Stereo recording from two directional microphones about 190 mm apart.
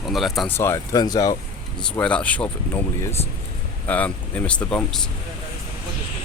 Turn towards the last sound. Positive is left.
turn(degrees=5)  # may be behind; listen again after turning